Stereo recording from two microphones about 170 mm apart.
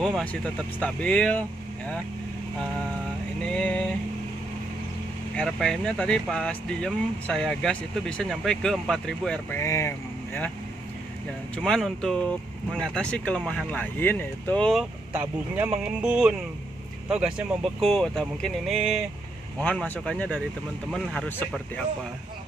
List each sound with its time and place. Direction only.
0.0 s speech: 5° left (ahead or behind)
3.4 s speech: 5° left (ahead or behind)
5.3 s speech: 5° left (ahead or behind)
9.6 s speech: 15° left (ahead or behind)
11.5 s speech: 5° left (ahead or behind)
15.1 s speech: 10° right (ahead or behind)